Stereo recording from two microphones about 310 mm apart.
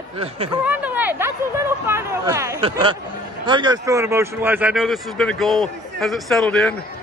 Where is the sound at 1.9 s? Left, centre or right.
Centre.